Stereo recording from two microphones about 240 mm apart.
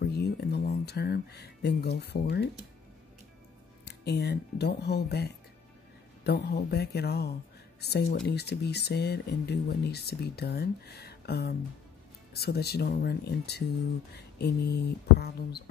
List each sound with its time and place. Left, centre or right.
0.0 s speech: left
3.8 s speech: left